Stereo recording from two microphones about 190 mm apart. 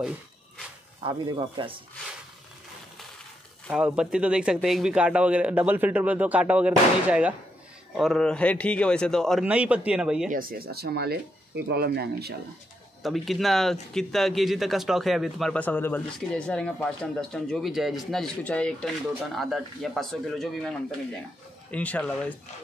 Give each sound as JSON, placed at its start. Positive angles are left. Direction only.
{"t": 1.0, "sound": "speech", "side_deg": -25}
{"t": 3.6, "sound": "a man's voice", "side_deg": -5}
{"t": 10.3, "sound": "speech", "side_deg": -50}
{"t": 13.0, "sound": "speech", "side_deg": 0}